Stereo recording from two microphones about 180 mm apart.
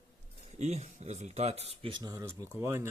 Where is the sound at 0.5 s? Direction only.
40° right (ahead or behind).